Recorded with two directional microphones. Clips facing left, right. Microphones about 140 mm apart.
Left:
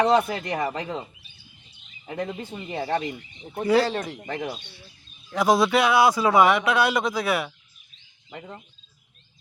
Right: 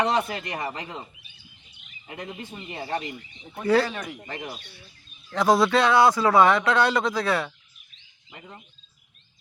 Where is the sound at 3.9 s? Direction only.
30° left (ahead or behind).